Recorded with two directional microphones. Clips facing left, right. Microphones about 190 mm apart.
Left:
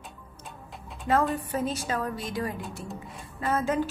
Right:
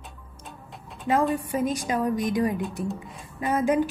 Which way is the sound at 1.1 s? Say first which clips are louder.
Right 2 dB; 10° right (ahead or behind).